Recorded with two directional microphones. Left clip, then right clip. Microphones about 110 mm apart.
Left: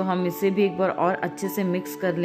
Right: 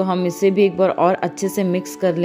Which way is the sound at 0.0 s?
30° right (ahead or behind).